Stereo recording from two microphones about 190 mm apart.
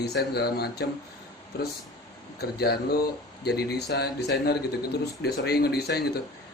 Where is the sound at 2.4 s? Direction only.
55° left (ahead or behind).